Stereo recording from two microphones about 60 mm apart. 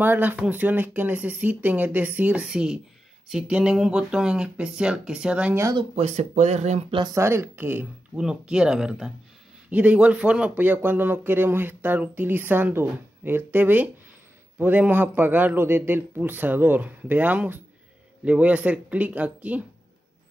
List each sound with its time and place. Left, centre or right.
0.0 s a man's voice: right
2.4 s speech: centre
7.2 s a man's voice: right
8.2 s speech: centre
9.7 s speech: right
10.5 s a man's voice: right